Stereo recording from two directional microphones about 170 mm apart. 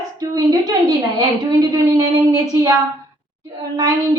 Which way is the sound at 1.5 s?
20° right (ahead or behind).